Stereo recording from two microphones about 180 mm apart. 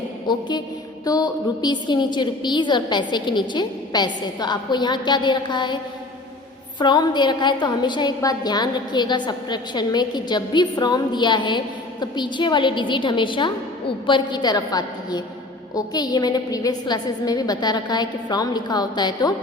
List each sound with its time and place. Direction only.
0.3 s a woman's voice: 25° left (ahead or behind)